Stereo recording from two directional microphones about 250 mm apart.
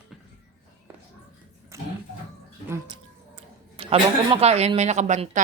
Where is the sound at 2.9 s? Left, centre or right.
Right.